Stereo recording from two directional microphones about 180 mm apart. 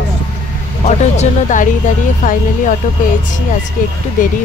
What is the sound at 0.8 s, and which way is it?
A woman's voice, 40° left (ahead or behind).